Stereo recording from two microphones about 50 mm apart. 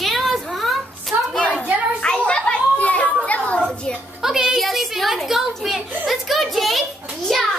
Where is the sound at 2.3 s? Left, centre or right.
Left.